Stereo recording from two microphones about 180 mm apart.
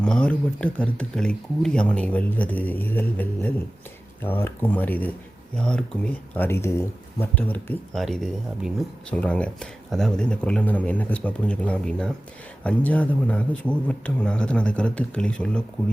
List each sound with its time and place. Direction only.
0.0 s speech: 5° left (ahead or behind)